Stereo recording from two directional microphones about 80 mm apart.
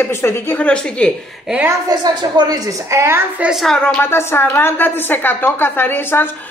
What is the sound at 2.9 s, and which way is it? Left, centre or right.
Speech, right.